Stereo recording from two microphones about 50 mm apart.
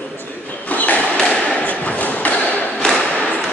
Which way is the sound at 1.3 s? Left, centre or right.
Left.